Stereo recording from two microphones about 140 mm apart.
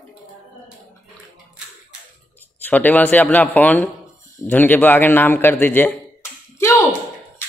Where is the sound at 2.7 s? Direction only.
10° left (ahead or behind).